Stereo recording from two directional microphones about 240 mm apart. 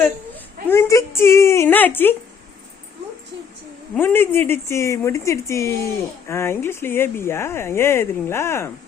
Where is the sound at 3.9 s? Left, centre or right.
Centre.